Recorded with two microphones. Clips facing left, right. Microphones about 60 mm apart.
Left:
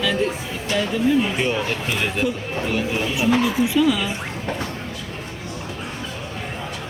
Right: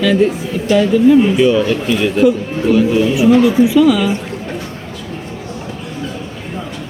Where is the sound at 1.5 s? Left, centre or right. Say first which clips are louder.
Right 9 dB; right.